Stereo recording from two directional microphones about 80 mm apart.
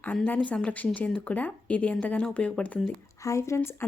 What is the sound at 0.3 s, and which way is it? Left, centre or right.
Speech, centre.